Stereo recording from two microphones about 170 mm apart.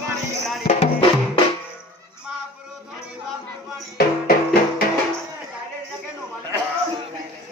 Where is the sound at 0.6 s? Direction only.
40° left (ahead or behind).